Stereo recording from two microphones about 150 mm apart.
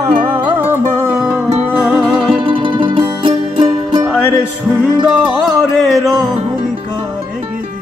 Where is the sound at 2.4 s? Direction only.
30° right (ahead or behind).